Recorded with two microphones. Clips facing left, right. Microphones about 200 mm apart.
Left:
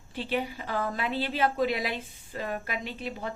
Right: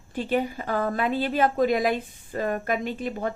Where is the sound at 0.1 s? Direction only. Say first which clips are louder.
Right 5 dB; 50° right (ahead or behind).